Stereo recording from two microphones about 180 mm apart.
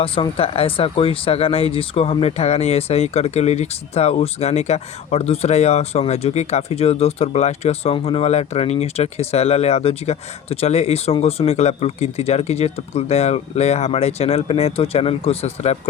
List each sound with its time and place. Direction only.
0.0 s speech: 30° left (ahead or behind)